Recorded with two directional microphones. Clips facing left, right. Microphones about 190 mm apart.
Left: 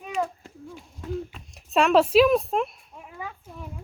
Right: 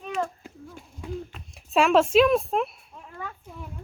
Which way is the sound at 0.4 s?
Centre (ahead or behind).